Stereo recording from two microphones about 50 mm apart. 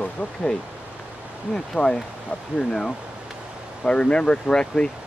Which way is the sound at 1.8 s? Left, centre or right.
Left.